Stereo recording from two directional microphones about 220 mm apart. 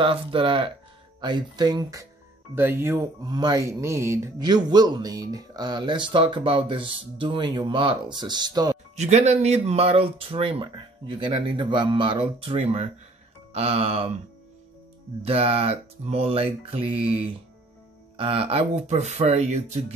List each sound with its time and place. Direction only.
0.0 s speech: 25° right (ahead or behind)
8.9 s speech: 30° right (ahead or behind)
15.2 s speech: 25° right (ahead or behind)